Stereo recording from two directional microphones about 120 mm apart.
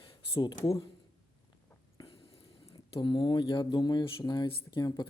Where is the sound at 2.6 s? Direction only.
45° left (ahead or behind).